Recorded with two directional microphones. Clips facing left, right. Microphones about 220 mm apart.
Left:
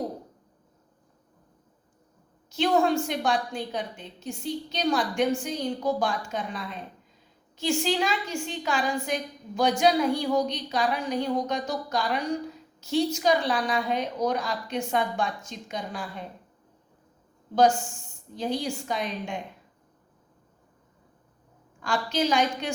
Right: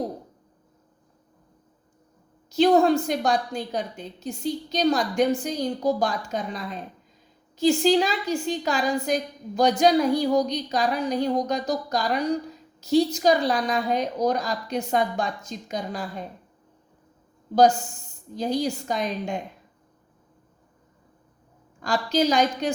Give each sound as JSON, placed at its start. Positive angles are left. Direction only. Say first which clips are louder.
{"t": 2.5, "sound": "a woman's voice", "louder": "right 5 dB", "side_deg": -40}
{"t": 17.5, "sound": "a woman's voice", "louder": "right 3 dB", "side_deg": -40}
{"t": 21.8, "sound": "a woman's voice", "louder": "right 4 dB", "side_deg": -40}